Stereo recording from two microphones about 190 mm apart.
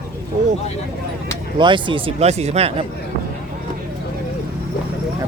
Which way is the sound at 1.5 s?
25° right (ahead or behind).